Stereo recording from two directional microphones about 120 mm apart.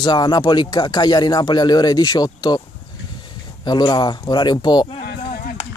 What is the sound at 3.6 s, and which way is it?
Speech, 35° left (ahead or behind).